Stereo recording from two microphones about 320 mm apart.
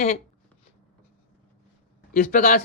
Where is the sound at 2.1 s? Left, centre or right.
Left.